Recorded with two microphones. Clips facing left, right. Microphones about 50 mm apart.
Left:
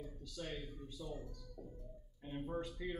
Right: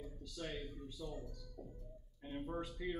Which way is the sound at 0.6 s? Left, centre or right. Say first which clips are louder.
Right 2 dB; centre.